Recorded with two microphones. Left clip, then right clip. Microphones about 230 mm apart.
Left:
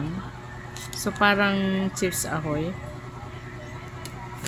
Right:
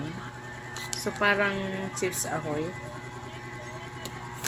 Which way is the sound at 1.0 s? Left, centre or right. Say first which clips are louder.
Left 4 dB; left.